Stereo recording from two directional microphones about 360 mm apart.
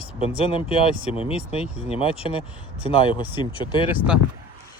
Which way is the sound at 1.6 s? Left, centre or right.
Centre.